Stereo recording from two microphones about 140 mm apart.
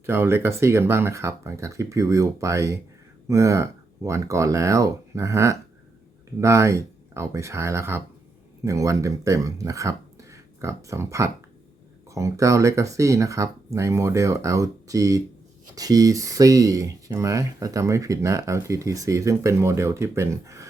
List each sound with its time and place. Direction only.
0.0 s speech: 15° right (ahead or behind)